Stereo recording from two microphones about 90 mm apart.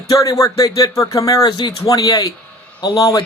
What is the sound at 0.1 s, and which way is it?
Speech, 40° left (ahead or behind).